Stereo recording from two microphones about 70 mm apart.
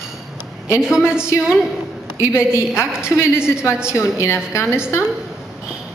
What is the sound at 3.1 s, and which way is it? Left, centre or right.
Speech, left.